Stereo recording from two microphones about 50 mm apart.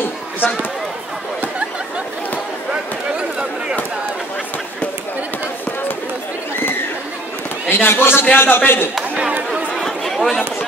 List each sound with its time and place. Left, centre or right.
3.2 s a sound: centre
7.7 s a man's voice: left
9.8 s chatter: centre